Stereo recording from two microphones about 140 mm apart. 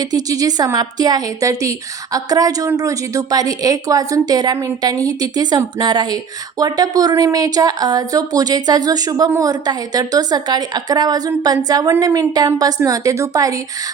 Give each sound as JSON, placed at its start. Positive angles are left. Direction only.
{"t": 0.1, "sound": "speech", "side_deg": -25}